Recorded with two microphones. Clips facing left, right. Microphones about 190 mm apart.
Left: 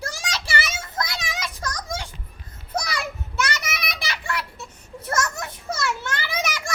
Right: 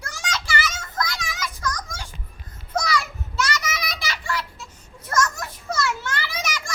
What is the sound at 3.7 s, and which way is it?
Belly laugh, 60° left (ahead or behind).